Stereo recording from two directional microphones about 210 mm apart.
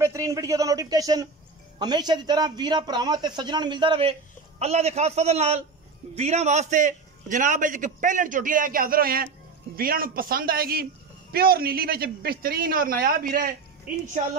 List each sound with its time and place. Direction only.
0.0 s a man's voice: 15° right (ahead or behind); by 13.6 s 40° right (ahead or behind)